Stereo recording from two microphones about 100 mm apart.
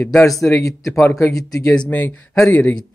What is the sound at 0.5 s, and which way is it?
Speech, 30° left (ahead or behind).